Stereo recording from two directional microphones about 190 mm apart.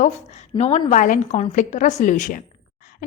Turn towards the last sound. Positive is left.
turn(degrees=45)  # may be behind; listen again after turning